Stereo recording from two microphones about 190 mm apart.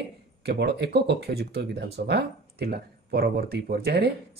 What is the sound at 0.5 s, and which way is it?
Speech, 60° right (ahead or behind).